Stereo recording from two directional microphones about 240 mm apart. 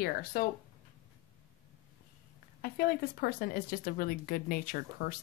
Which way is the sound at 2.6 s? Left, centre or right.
Left.